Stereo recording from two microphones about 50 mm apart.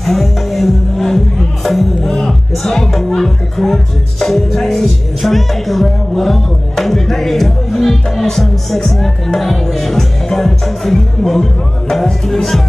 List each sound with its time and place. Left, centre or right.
0.0 s speech: centre